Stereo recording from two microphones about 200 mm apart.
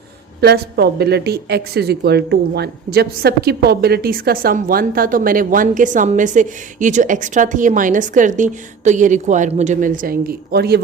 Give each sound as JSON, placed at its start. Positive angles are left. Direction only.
{"t": 0.4, "sound": "a woman's voice", "side_deg": -55}